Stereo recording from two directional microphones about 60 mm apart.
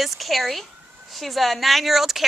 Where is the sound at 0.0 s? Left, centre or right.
Centre.